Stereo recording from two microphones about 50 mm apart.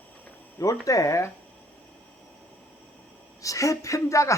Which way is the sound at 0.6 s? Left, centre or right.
Left.